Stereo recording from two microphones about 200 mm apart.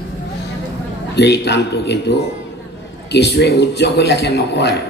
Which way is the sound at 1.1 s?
55° left (ahead or behind).